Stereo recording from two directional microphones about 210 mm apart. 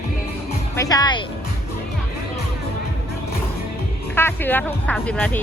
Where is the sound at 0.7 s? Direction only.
15° left (ahead or behind).